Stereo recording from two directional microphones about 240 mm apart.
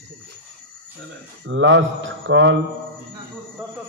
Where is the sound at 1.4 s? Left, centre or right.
Right.